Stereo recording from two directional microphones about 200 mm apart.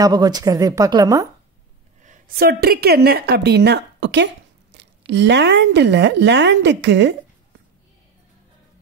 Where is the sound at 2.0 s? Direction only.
45° right (ahead or behind); by 7.1 s 60° right (ahead or behind).